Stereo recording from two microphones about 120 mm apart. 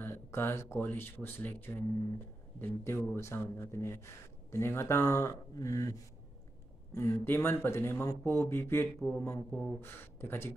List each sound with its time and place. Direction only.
0.0 s speech: 20° left (ahead or behind)